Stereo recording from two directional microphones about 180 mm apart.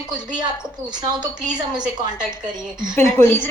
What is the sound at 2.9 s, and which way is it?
Speech, 15° left (ahead or behind).